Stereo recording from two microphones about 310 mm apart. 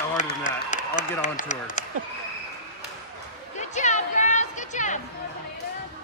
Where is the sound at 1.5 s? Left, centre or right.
Left.